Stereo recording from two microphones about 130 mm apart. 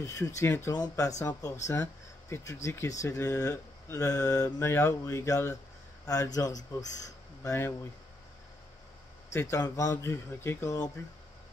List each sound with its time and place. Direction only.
0.0 s speech: 25° left (ahead or behind)
9.3 s speech: 20° left (ahead or behind)